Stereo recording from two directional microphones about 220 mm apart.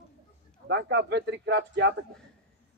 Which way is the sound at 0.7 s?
50° right (ahead or behind).